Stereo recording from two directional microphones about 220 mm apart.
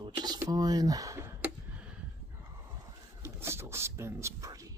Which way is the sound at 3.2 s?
10° right (ahead or behind).